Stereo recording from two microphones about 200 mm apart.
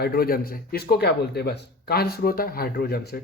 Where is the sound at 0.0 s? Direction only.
50° left (ahead or behind).